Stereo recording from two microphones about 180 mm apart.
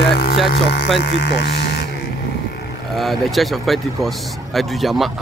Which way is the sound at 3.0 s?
Centre (ahead or behind).